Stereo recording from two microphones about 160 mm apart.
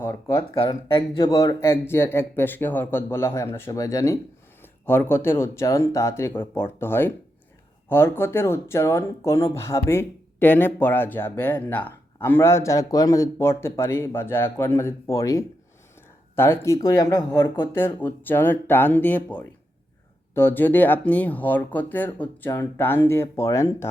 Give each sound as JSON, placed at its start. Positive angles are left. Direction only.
{"t": 0.0, "sound": "speech", "side_deg": 15}
{"t": 17.8, "sound": "speech", "side_deg": 10}